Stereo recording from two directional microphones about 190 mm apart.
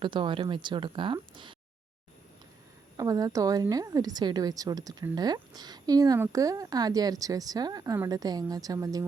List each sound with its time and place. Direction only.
0.0 s speech: 25° right (ahead or behind)
3.0 s speech: 20° right (ahead or behind)